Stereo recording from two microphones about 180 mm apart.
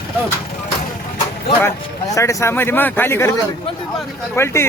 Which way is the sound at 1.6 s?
15° left (ahead or behind).